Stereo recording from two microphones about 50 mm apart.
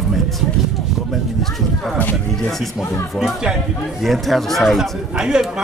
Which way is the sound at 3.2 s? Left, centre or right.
Centre.